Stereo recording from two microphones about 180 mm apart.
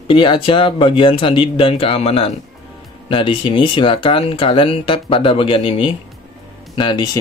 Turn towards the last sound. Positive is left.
turn(degrees=25)  # may be behind; listen again after turning